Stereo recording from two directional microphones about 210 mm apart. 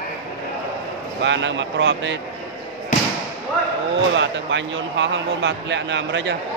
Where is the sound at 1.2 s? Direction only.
60° right (ahead or behind).